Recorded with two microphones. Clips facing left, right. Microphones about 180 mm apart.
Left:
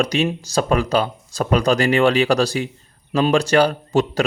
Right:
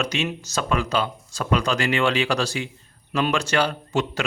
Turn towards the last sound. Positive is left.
turn(degrees=35)  # may be behind; listen again after turning